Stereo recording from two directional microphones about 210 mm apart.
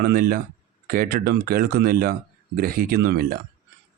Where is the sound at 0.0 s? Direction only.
45° right (ahead or behind).